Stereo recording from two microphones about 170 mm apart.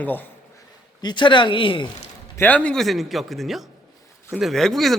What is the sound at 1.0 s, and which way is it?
Speech, 25° left (ahead or behind).